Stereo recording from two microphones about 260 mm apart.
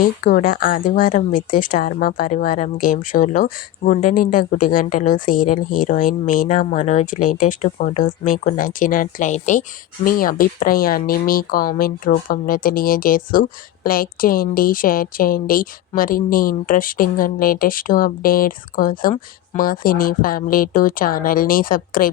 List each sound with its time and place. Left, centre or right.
0.0 s speech: left